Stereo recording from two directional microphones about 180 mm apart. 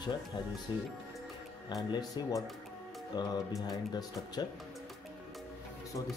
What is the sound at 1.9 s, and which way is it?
Speech, 20° left (ahead or behind).